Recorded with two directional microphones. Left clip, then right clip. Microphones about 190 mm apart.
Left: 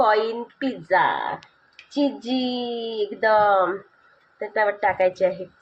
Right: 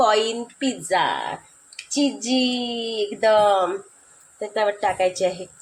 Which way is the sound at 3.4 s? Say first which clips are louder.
Even; 20° right (ahead or behind).